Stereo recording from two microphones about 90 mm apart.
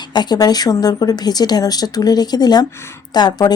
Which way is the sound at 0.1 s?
50° left (ahead or behind).